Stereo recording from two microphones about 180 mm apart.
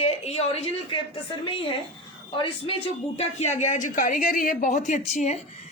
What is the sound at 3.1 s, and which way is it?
A woman's voice, 40° left (ahead or behind).